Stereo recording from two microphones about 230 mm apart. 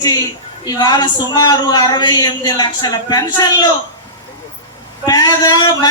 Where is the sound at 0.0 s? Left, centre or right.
Centre.